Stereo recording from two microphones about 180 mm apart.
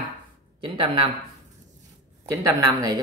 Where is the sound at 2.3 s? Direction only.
20° right (ahead or behind).